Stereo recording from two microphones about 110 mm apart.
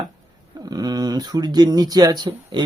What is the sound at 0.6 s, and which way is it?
Speech, 35° right (ahead or behind).